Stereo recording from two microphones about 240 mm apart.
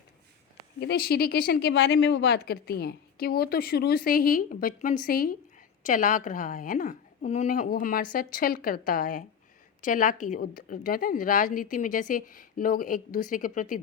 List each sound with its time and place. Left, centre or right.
0.8 s a woman's voice: left